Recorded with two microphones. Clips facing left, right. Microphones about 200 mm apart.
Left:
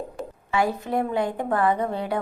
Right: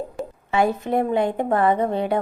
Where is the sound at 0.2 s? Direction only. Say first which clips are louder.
Right 4 dB; centre (ahead or behind).